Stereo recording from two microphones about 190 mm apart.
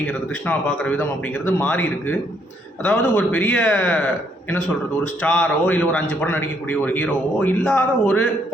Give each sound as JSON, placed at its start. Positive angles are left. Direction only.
{"t": 0.1, "sound": "a man's voice", "side_deg": 5}